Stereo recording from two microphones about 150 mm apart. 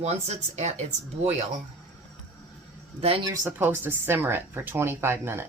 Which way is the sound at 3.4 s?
15° right (ahead or behind).